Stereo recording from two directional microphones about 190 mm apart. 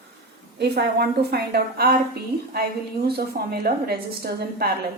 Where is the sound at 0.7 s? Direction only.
55° right (ahead or behind).